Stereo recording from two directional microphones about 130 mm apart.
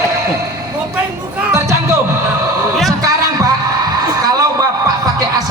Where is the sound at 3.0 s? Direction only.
30° right (ahead or behind).